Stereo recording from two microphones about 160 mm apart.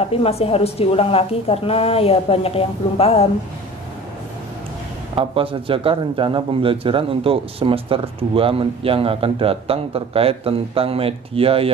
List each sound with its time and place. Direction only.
0.0 s a woman's voice: 35° left (ahead or behind)
5.1 s a man's voice: 35° right (ahead or behind)